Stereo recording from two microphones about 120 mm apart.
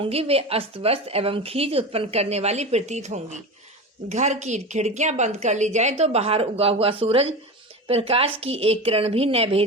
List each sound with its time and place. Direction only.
0.0 s a woman's voice: 55° right (ahead or behind)